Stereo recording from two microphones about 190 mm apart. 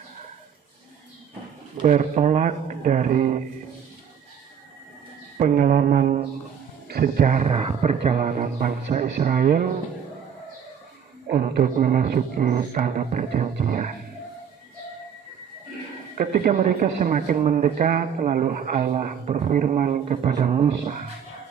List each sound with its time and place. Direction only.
1.9 s speech: 40° right (ahead or behind)
5.4 s speech: 45° right (ahead or behind)
8.1 s speech: 45° right (ahead or behind)
11.2 s speech: 50° right (ahead or behind)
16.2 s speech: 45° right (ahead or behind)